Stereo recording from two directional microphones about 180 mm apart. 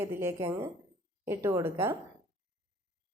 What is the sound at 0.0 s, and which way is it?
A woman's voice, 15° right (ahead or behind).